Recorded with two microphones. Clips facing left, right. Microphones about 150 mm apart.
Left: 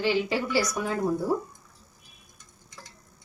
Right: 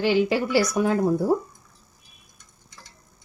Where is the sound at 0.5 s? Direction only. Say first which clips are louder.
Right 6 dB; 65° right (ahead or behind).